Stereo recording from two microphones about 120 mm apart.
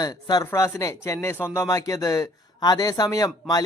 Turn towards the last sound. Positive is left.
turn(degrees=30)  # may be behind; listen again after turning